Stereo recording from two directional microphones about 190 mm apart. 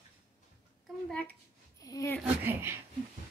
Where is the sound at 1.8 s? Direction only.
15° left (ahead or behind).